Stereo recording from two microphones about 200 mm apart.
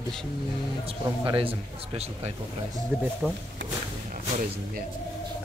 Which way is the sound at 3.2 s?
Centre (ahead or behind).